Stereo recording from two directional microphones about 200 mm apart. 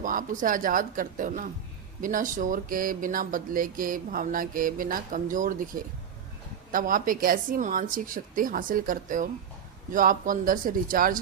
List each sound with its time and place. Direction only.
0.0 s speech: 45° right (ahead or behind)
6.7 s speech: 45° right (ahead or behind)